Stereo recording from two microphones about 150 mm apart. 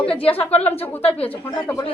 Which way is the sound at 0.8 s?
10° left (ahead or behind).